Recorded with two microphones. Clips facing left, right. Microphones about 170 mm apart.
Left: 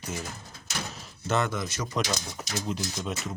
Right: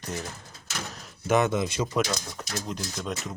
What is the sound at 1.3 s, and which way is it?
Speech, 20° right (ahead or behind).